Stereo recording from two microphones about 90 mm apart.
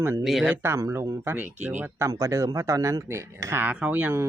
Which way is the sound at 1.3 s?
20° right (ahead or behind).